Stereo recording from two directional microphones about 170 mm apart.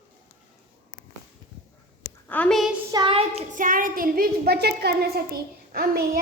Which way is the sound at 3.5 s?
55° right (ahead or behind).